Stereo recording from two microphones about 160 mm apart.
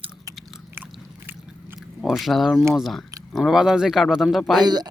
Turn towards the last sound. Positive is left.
turn(degrees=-25)  # may be behind; listen again after turning